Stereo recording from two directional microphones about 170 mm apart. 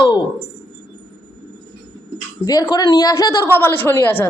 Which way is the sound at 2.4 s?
20° left (ahead or behind).